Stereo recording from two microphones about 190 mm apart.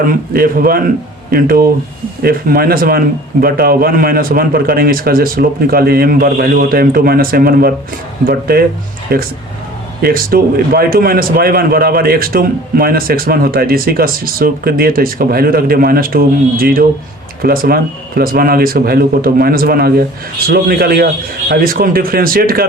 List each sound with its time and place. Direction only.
0.1 s a man's voice: 50° right (ahead or behind)